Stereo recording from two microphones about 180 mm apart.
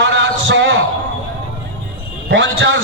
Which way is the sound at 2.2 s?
90° right.